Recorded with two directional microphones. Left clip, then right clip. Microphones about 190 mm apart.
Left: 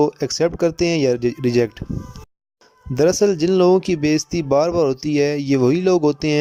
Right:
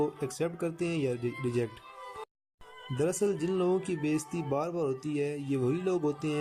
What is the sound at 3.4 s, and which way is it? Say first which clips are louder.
Speech: left 15 dB; 55° left (ahead or behind).